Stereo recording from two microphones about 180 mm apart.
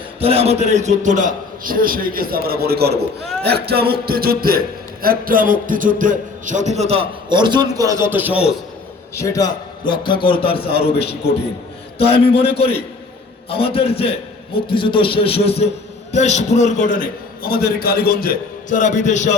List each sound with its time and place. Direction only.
0.2 s a man's voice: 35° right (ahead or behind); by 3.1 s 65° right (ahead or behind)
3.4 s music: 65° right (ahead or behind)
5.0 s speech: 50° right (ahead or behind); by 8.4 s 10° right (ahead or behind)
9.1 s a man's voice: 20° left (ahead or behind); by 17.0 s 45° left (ahead or behind)
17.4 s a man's voice: 55° left (ahead or behind)
18.7 s a man's voice: 45° left (ahead or behind)